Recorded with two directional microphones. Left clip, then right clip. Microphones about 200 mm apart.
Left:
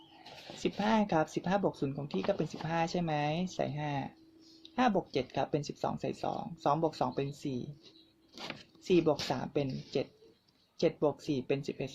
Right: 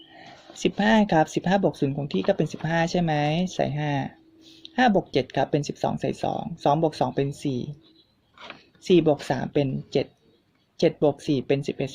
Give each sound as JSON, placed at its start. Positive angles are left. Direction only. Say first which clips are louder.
{"t": 0.6, "sound": "speech", "louder": "right 10 dB", "side_deg": -30}
{"t": 8.8, "sound": "speech", "louder": "right 9 dB", "side_deg": -30}